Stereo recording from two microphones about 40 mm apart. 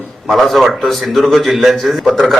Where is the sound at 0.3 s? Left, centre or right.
Centre.